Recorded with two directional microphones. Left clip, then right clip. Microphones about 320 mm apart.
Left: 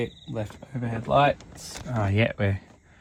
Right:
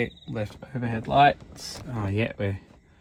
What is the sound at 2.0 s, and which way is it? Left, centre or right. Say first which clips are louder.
Speech: left 3 dB; left.